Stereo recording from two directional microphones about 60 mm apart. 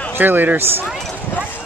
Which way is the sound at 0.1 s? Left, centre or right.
Right.